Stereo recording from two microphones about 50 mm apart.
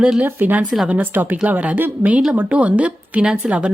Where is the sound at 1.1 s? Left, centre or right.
Right.